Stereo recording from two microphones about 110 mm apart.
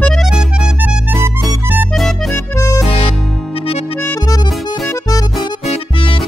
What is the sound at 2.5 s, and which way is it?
Music, 30° left (ahead or behind).